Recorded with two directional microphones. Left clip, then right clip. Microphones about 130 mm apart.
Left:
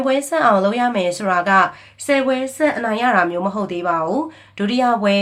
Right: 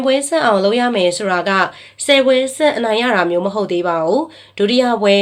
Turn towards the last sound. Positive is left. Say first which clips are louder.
# right 3 dB
turn(degrees=-30)  # may be behind; listen again after turning